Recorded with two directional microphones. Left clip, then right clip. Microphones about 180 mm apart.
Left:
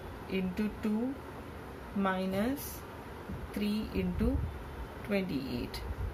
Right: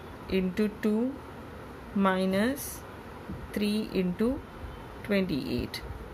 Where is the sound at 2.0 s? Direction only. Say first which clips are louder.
Right 6 dB; 60° right (ahead or behind).